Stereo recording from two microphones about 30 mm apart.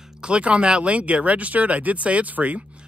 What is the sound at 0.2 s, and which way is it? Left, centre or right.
Speech, right.